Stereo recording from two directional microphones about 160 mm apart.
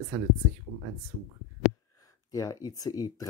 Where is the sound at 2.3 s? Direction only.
25° left (ahead or behind).